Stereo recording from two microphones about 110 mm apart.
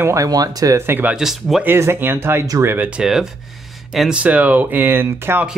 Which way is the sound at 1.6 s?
20° right (ahead or behind).